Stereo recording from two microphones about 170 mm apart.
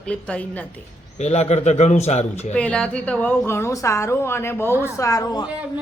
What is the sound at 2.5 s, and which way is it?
A woman's voice, 10° left (ahead or behind).